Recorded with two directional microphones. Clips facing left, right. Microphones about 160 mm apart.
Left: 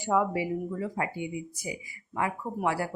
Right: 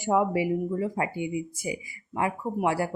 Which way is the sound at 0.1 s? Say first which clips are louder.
Right 3 dB; 20° right (ahead or behind).